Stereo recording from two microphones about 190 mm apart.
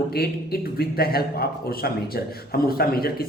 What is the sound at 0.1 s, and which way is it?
A man's voice, 55° left (ahead or behind).